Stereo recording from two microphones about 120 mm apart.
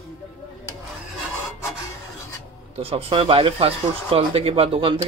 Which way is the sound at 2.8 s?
50° right (ahead or behind).